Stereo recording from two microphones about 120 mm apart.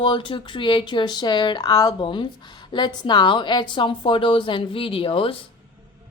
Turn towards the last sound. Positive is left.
turn(degrees=50)  # may be behind; listen again after turning